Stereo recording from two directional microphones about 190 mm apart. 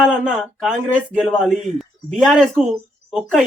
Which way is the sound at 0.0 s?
5° right (ahead or behind).